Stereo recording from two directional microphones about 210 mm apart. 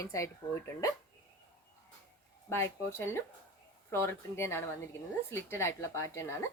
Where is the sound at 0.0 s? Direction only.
15° left (ahead or behind).